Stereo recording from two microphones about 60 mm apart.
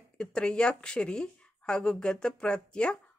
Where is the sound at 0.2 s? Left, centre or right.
Centre.